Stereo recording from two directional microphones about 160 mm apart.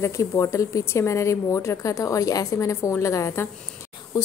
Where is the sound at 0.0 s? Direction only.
20° left (ahead or behind).